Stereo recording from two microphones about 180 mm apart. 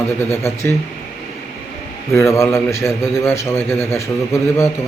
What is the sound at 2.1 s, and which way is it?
A man's voice, 15° left (ahead or behind).